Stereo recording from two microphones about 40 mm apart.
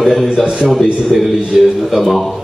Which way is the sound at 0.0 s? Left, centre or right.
Centre.